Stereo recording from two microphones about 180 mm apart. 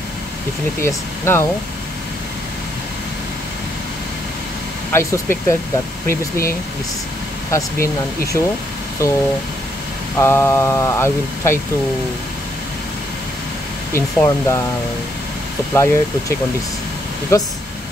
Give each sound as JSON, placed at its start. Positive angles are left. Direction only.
{"t": 0.8, "sound": "speech", "side_deg": 15}
{"t": 4.9, "sound": "speech", "side_deg": 15}
{"t": 7.5, "sound": "speech", "side_deg": 15}
{"t": 13.9, "sound": "speech", "side_deg": 15}
{"t": 15.7, "sound": "speech", "side_deg": 15}